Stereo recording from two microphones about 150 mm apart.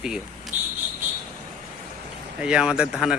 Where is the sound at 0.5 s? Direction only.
55° right (ahead or behind).